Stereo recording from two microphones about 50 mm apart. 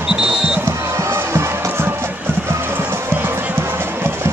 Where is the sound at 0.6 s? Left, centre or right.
Right.